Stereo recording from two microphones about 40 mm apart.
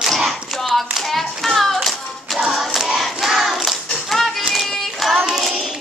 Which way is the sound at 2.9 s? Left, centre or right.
Centre.